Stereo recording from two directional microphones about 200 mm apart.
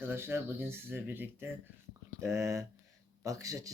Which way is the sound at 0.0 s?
10° right (ahead or behind).